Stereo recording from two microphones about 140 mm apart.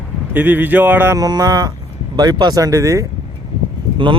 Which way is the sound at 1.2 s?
30° right (ahead or behind).